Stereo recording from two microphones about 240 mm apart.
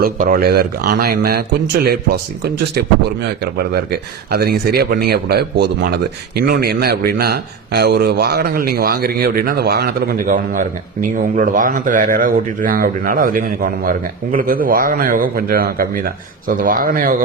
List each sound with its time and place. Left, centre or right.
0.0 s speech: right
3.4 s speech: right